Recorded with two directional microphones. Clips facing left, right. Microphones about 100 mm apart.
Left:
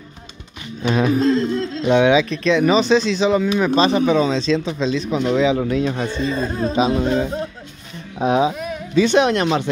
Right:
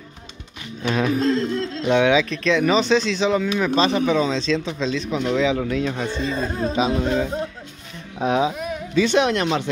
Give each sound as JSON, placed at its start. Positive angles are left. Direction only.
{"t": 0.8, "sound": "a sound", "side_deg": 15}
{"t": 1.8, "sound": "speech", "side_deg": 10}
{"t": 3.4, "sound": "speech", "side_deg": 20}
{"t": 6.2, "sound": "speech", "side_deg": -5}
{"t": 6.7, "sound": "speech", "side_deg": 20}